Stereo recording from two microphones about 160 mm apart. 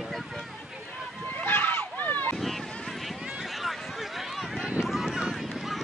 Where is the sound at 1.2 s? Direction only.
10° left (ahead or behind).